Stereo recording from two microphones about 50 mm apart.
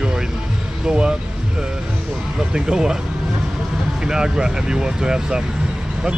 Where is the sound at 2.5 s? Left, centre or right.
Centre.